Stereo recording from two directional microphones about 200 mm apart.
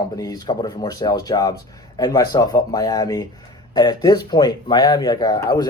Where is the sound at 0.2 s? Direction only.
20° left (ahead or behind).